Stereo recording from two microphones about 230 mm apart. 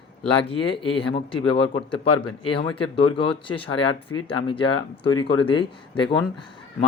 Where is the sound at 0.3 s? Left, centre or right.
Left.